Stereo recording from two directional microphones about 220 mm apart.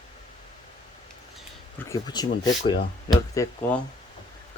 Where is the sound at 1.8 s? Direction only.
15° left (ahead or behind).